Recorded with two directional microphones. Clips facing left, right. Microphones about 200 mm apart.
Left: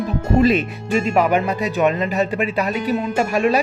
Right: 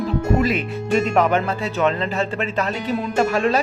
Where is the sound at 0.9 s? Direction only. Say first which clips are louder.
Left 1 dB; 10° left (ahead or behind).